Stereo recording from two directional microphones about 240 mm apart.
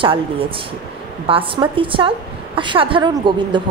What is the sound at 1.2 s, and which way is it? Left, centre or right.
A woman's voice, right.